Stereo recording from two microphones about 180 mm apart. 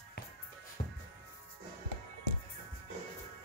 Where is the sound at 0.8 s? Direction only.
40° left (ahead or behind).